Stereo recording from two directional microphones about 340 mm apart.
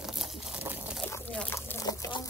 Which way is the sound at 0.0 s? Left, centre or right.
Centre.